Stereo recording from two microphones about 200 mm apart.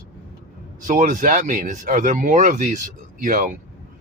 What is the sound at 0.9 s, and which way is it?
Speech, 40° right (ahead or behind).